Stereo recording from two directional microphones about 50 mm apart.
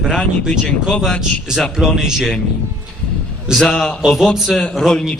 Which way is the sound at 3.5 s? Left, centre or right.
Centre.